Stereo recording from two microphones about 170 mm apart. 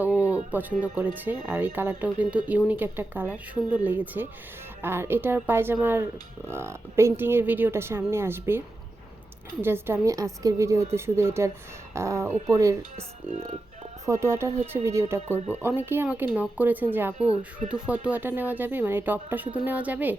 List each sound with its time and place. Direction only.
0.5 s speech: 10° right (ahead or behind)
13.0 s speech: 45° right (ahead or behind)
14.0 s speech: 20° right (ahead or behind)